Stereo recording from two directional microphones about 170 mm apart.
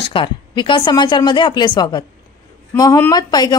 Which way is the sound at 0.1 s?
30° left (ahead or behind).